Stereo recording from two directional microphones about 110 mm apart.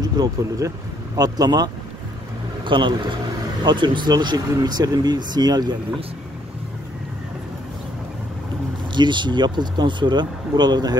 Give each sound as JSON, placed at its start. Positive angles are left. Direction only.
{"t": 0.1, "sound": "speech", "side_deg": -30}
{"t": 8.9, "sound": "speech", "side_deg": -45}